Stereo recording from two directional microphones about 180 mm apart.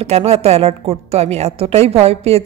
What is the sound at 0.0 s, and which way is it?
A woman's voice, 35° right (ahead or behind).